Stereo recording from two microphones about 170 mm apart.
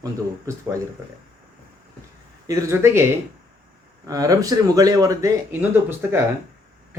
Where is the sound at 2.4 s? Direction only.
20° right (ahead or behind).